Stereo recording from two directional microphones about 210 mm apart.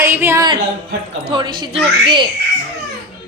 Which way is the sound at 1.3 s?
20° right (ahead or behind).